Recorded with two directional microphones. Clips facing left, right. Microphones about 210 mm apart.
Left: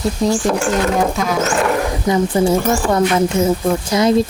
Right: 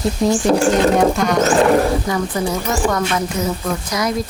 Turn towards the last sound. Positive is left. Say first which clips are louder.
# left 6 dB
turn(degrees=25)  # may be behind; listen again after turning